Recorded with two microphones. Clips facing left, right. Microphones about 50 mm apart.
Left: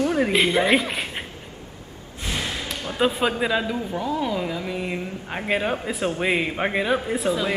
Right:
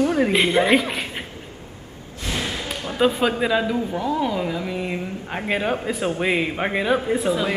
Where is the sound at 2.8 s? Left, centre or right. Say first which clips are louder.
Right 3 dB; centre.